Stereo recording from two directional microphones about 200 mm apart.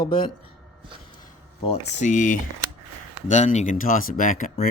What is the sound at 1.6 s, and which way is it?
Speech, 35° left (ahead or behind).